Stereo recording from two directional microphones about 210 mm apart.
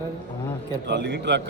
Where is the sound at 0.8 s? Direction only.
55° right (ahead or behind).